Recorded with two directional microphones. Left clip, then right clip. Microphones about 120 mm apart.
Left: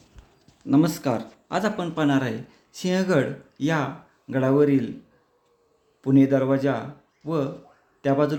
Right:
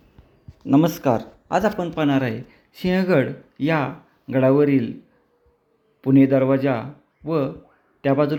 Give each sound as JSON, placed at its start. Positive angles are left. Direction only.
{"t": 0.7, "sound": "speech", "side_deg": -20}
{"t": 1.5, "sound": "speech", "side_deg": -10}
{"t": 2.0, "sound": "speech", "side_deg": -20}
{"t": 6.0, "sound": "speech", "side_deg": -30}